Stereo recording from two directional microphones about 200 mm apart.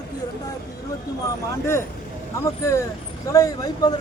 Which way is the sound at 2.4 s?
15° left (ahead or behind).